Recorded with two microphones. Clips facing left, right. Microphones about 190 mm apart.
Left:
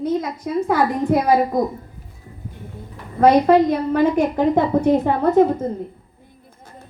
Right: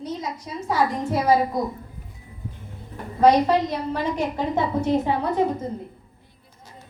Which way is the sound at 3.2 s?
55° left (ahead or behind).